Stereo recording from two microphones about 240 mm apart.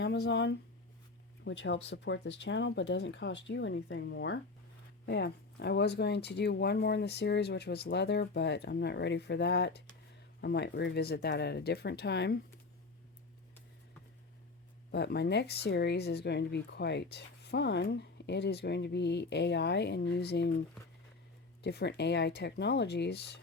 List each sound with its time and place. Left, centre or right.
0.0 s speech: left
14.9 s speech: left
21.6 s speech: left